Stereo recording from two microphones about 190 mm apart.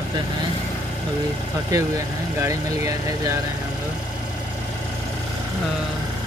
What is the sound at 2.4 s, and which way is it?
Speech, 15° right (ahead or behind).